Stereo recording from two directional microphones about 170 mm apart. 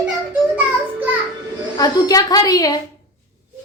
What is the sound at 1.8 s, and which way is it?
Speech, 20° left (ahead or behind).